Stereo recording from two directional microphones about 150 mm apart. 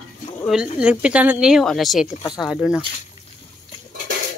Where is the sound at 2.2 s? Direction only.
25° left (ahead or behind).